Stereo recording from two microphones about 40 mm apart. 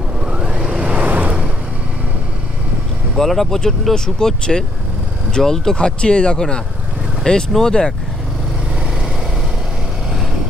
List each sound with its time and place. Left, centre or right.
0.3 s vehicle: right
3.2 s speech: centre
5.8 s speech: left